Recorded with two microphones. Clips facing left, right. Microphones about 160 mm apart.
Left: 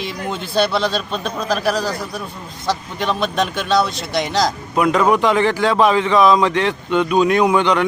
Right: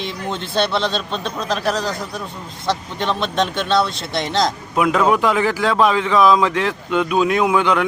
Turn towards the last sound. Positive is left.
turn(degrees=-5)  # may be behind; listen again after turning